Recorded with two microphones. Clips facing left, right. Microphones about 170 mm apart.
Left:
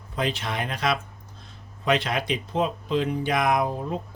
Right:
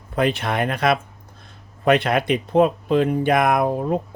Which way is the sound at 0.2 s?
60° right (ahead or behind).